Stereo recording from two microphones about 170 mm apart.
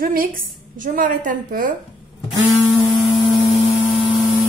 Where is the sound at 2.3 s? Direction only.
Centre (ahead or behind).